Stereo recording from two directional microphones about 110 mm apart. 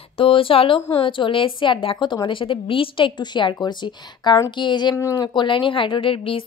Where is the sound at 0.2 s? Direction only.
55° left (ahead or behind).